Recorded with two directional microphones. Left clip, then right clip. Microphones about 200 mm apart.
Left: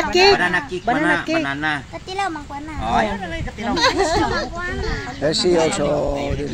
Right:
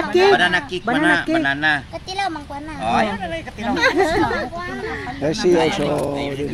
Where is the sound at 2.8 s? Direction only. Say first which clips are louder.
Right 1 dB; 5° right (ahead or behind).